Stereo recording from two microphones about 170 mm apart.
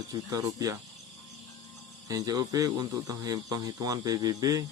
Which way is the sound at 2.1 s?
20° right (ahead or behind).